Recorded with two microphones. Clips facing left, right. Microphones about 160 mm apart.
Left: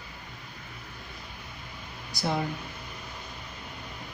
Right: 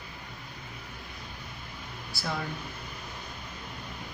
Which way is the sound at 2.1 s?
20° left (ahead or behind).